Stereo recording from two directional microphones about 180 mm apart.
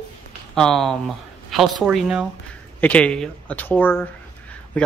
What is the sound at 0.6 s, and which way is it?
Speech, centre (ahead or behind).